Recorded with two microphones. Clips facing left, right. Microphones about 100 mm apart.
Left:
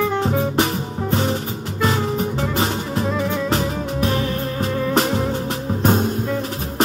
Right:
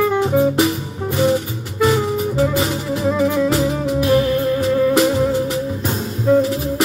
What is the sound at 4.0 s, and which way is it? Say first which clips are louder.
Music: right 7 dB; 35° left (ahead or behind).